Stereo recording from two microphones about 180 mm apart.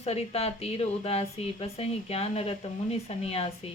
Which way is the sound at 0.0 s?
35° left (ahead or behind).